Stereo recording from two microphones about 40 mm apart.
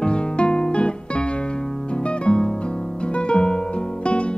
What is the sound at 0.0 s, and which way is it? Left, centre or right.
Music, left.